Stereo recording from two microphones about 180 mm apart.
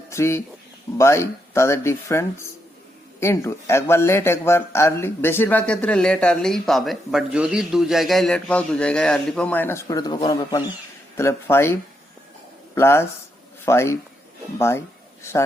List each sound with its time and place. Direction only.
0.1 s a man's voice: 15° left (ahead or behind)
15.2 s speech: 15° left (ahead or behind)